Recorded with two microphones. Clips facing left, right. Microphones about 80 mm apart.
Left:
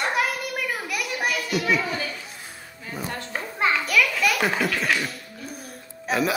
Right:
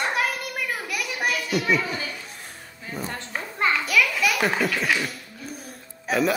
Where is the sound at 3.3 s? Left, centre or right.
Centre.